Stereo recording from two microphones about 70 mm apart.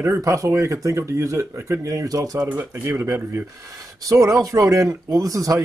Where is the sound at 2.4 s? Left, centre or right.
Right.